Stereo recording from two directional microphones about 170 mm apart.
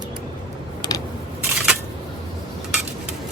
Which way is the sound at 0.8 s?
25° left (ahead or behind).